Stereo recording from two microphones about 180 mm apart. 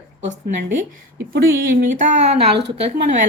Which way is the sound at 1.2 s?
60° right (ahead or behind).